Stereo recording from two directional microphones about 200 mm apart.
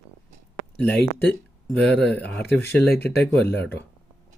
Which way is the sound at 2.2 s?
5° left (ahead or behind).